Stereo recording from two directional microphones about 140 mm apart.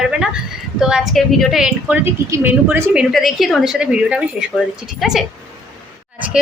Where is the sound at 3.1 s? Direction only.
Centre (ahead or behind).